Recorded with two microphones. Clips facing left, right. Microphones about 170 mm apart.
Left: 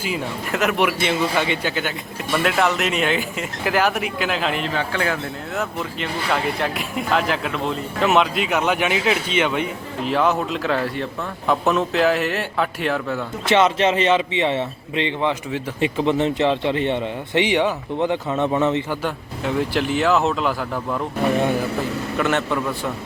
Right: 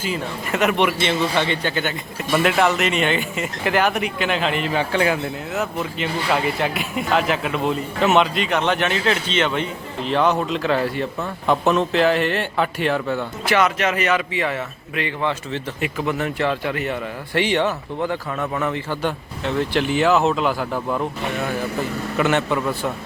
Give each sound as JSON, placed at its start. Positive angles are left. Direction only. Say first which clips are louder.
{"t": 0.5, "sound": "speech", "louder": "right 1 dB", "side_deg": 0}
{"t": 4.7, "sound": "speech", "louder": "right 3 dB", "side_deg": -20}
{"t": 5.5, "sound": "speech", "louder": "right 1 dB", "side_deg": 0}
{"t": 13.4, "sound": "speech", "louder": "left 3 dB", "side_deg": 25}
{"t": 15.8, "sound": "speech", "louder": "left 5 dB", "side_deg": 25}
{"t": 18.9, "sound": "speech", "louder": "right 1 dB", "side_deg": 10}
{"t": 22.2, "sound": "speech", "louder": "right 2 dB", "side_deg": 0}